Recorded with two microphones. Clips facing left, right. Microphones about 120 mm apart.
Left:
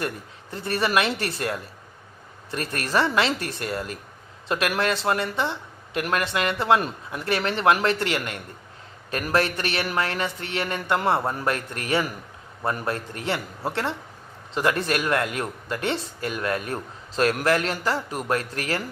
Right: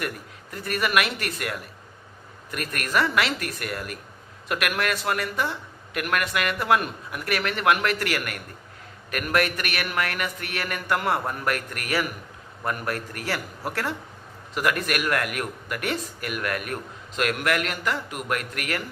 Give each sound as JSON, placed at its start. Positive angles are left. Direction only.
{"t": 0.5, "sound": "speech", "side_deg": 30}